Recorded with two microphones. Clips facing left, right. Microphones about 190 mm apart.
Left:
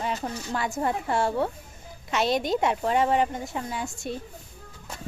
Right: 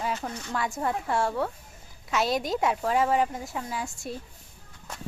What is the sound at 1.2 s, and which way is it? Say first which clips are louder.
Speech: left 3 dB; 25° left (ahead or behind).